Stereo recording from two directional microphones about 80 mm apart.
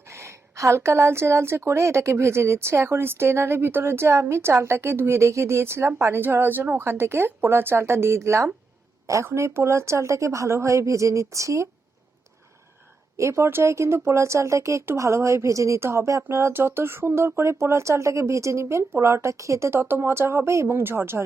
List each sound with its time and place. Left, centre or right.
0.1 s speech: right
13.1 s speech: right